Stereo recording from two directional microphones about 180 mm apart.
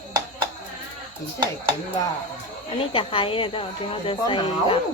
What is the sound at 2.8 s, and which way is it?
Speech, 30° left (ahead or behind).